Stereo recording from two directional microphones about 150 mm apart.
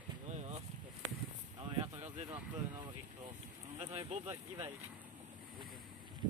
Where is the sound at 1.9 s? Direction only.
45° right (ahead or behind).